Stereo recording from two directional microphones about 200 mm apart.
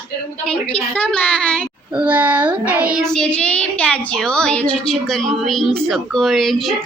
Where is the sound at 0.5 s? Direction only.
30° left (ahead or behind).